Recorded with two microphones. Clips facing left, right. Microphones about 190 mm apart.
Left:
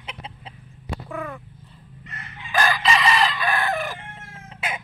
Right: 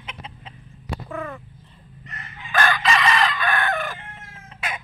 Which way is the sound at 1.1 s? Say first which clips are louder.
Even; 5° left (ahead or behind).